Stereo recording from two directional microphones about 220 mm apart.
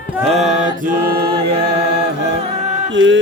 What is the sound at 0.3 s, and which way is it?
Music, 35° right (ahead or behind).